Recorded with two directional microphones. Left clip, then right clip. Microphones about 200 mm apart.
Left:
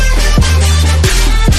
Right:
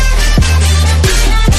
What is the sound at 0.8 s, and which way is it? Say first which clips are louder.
Music: even; centre (ahead or behind).